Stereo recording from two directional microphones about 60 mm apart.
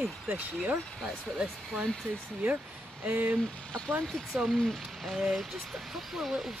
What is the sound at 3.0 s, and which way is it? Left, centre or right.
Speech, right.